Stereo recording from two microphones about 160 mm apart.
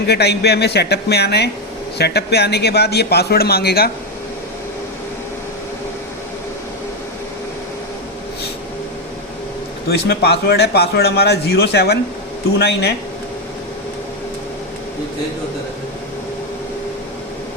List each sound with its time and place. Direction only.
0.1 s a man's voice: 90° left
10.1 s a man's voice: 90° left